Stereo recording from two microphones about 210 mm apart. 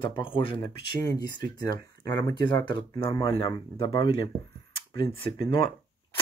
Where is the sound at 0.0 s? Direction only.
25° left (ahead or behind).